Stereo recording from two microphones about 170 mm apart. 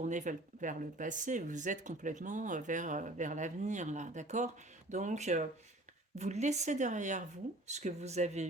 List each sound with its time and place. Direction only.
0.0 s speech: 45° right (ahead or behind)